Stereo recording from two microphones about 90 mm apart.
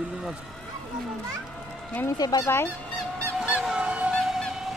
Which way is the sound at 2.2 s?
45° left (ahead or behind).